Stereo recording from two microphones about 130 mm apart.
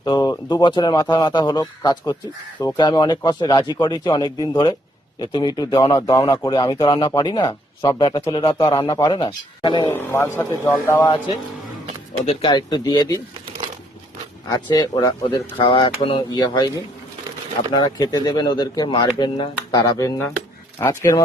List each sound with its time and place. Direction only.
0.0 s speech: 30° left (ahead or behind)
9.9 s a man's voice: 20° left (ahead or behind)
12.2 s speech: 50° left (ahead or behind)
12.5 s speech: 35° left (ahead or behind)
14.5 s a man's voice: 30° left (ahead or behind)